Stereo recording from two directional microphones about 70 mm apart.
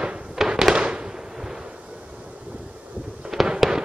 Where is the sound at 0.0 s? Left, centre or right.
Centre.